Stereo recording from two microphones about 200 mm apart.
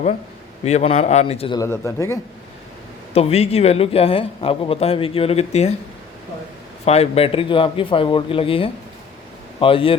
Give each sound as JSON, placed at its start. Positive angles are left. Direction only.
{"t": 0.6, "sound": "a man's voice", "side_deg": 35}
{"t": 1.5, "sound": "speech", "side_deg": 15}
{"t": 3.1, "sound": "a woman's voice", "side_deg": 30}
{"t": 6.8, "sound": "a woman's voice", "side_deg": 30}